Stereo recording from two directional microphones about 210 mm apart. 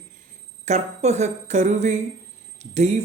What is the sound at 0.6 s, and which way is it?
A man's voice, 35° right (ahead or behind).